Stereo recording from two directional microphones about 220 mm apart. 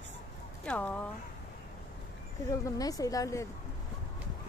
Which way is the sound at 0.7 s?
5° left (ahead or behind).